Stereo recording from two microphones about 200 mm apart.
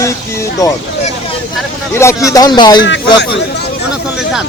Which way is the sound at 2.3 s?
20° left (ahead or behind).